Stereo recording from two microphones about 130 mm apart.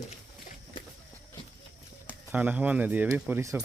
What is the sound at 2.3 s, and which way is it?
Speech, 10° right (ahead or behind).